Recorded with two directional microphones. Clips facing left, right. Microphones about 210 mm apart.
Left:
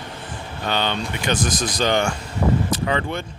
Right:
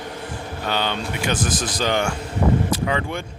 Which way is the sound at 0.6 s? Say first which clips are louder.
Left 1 dB; 5° right (ahead or behind).